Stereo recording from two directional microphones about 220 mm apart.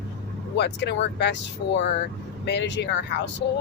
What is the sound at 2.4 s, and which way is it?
Speech, 50° left (ahead or behind).